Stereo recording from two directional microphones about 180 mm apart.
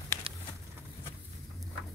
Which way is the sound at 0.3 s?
30° right (ahead or behind).